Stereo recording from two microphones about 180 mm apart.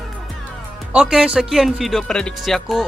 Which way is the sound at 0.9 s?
5° right (ahead or behind).